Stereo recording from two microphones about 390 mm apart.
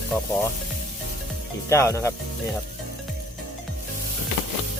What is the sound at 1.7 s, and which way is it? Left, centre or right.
Speech, centre.